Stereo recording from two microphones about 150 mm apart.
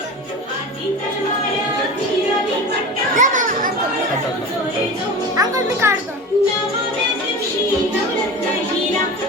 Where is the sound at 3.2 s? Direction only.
60° right (ahead or behind).